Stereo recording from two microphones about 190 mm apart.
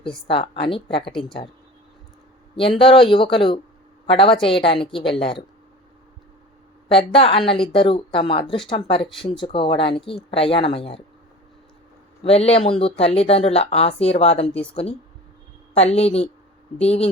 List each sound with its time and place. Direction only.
0.3 s speech: 30° left (ahead or behind)
2.6 s a woman's voice: 30° left (ahead or behind)
6.8 s speech: 30° left (ahead or behind)
12.2 s speech: 30° left (ahead or behind)
15.7 s a woman's voice: 35° left (ahead or behind)